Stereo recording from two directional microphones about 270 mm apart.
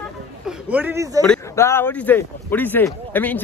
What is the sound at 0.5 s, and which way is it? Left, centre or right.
Speech, centre.